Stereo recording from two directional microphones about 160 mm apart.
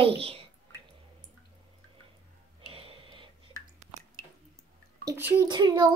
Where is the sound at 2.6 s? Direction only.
35° right (ahead or behind).